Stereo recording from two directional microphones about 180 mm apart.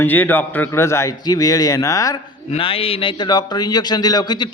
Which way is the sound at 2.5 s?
30° left (ahead or behind).